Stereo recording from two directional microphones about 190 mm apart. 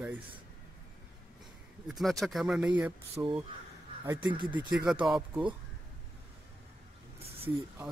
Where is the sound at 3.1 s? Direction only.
25° right (ahead or behind).